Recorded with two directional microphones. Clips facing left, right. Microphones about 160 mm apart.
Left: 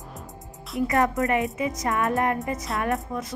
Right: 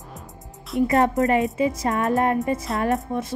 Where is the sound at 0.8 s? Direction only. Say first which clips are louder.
Right 4 dB; 25° right (ahead or behind).